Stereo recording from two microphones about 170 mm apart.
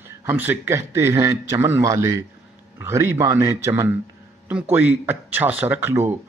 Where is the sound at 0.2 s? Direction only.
15° right (ahead or behind).